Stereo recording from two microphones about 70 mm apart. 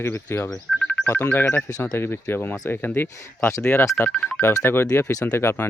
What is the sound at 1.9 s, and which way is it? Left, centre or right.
Speech, left.